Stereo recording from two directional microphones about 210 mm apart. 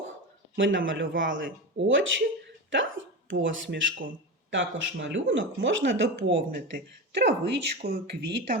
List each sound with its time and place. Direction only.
0.5 s speech: 65° right (ahead or behind)
2.6 s hiccup: 65° right (ahead or behind)
3.4 s speech: 65° right (ahead or behind); by 8.5 s 45° right (ahead or behind)